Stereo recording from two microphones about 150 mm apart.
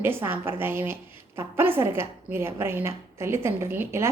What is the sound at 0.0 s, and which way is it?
Speech, 15° right (ahead or behind).